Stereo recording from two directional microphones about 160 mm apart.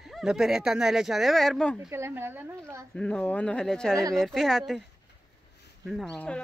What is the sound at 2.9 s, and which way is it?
Speech, 5° left (ahead or behind).